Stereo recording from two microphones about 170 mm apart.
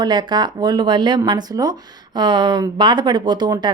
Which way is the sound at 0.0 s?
25° right (ahead or behind).